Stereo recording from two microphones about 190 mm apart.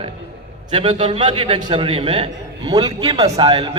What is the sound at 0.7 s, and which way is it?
A man's voice, 25° right (ahead or behind).